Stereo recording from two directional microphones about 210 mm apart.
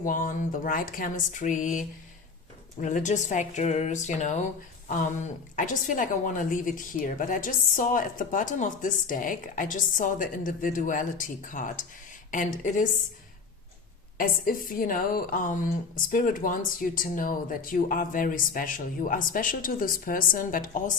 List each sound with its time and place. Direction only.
0.0 s a woman's voice: 40° left (ahead or behind)
14.2 s a woman's voice: 40° left (ahead or behind)